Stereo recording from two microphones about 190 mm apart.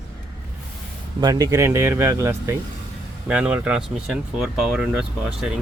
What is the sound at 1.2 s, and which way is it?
Speech, 20° right (ahead or behind).